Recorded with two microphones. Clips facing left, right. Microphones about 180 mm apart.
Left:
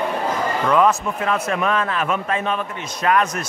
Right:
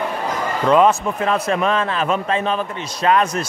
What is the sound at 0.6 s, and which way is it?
Speech, 25° right (ahead or behind).